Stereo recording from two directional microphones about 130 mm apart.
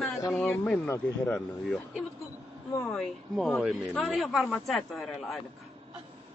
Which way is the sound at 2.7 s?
20° left (ahead or behind).